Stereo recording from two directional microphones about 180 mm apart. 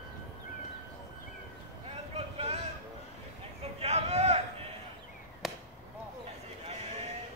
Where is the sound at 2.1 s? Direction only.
35° right (ahead or behind).